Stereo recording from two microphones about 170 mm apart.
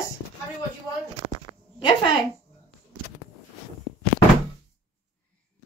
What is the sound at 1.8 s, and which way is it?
Speech, 25° left (ahead or behind).